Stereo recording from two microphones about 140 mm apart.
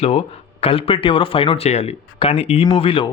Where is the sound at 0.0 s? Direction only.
45° left (ahead or behind).